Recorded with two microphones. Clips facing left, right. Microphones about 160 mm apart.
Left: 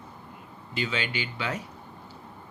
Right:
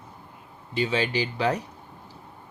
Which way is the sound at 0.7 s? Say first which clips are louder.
Right 6 dB; 30° right (ahead or behind).